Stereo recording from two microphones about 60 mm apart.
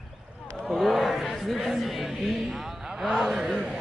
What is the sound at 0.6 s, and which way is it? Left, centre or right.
Speech, centre.